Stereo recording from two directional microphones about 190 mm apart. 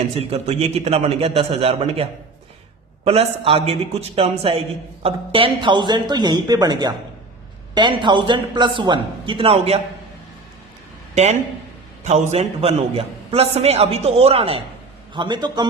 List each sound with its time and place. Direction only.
0.2 s a man's voice: 30° right (ahead or behind)
11.1 s a man's voice: 35° right (ahead or behind)